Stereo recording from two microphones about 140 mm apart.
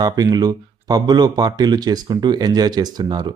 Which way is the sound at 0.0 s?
25° right (ahead or behind).